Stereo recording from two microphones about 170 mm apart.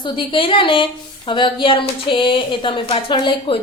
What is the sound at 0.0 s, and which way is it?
Speech, 30° left (ahead or behind).